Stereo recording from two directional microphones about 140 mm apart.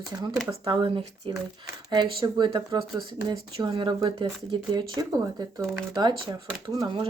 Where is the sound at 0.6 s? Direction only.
35° right (ahead or behind).